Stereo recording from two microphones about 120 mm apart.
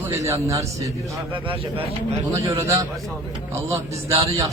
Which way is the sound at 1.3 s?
45° right (ahead or behind).